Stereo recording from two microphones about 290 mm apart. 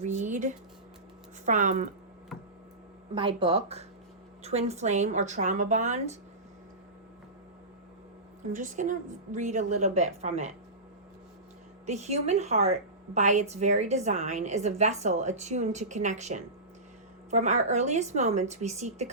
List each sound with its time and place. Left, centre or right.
0.0 s a woman's voice: right
3.2 s a woman's voice: centre
8.5 s a woman's voice: right
11.9 s a woman's voice: right